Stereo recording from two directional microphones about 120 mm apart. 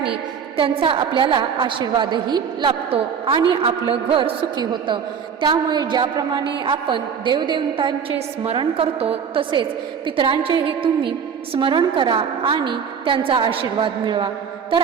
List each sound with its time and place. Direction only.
0.5 s a woman's voice: 45° right (ahead or behind)
8.5 s a woman's voice: 55° right (ahead or behind)